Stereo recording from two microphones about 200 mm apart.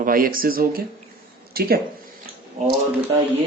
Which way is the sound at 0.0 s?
45° right (ahead or behind).